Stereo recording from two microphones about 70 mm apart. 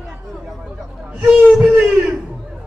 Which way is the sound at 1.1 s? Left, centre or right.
Centre.